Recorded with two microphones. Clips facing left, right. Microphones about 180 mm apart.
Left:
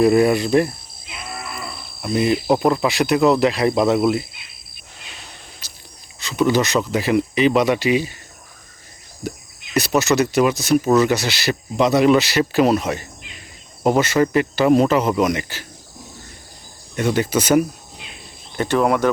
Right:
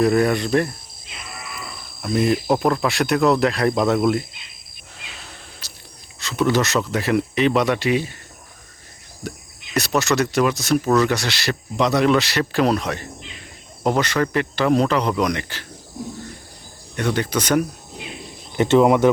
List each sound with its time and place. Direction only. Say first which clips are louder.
0.0 s speech: left 3 dB; 10° left (ahead or behind)
1.3 s livestock: left 4 dB; 35° left (ahead or behind)
2.0 s speech: left 1 dB; 5° left (ahead or behind)
5.2 s a sound: right 1 dB; centre (ahead or behind)
6.1 s speech: left 2 dB; centre (ahead or behind)
9.2 s speech: left 3 dB; 5° left (ahead or behind)
17.0 s speech: left 3 dB; 10° left (ahead or behind)
18.5 s speech: right 3 dB; 20° right (ahead or behind)